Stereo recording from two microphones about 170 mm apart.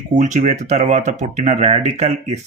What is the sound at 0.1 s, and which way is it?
Speech, 45° right (ahead or behind).